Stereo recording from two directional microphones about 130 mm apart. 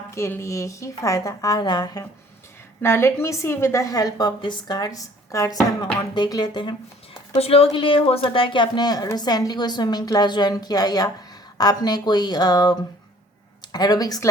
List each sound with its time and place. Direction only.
0.1 s a woman's voice: 20° left (ahead or behind)
2.8 s a woman's voice: 20° left (ahead or behind)
13.7 s speech: 30° left (ahead or behind)